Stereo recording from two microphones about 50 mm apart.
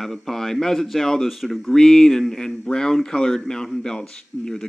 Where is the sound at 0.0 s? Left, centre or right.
Centre.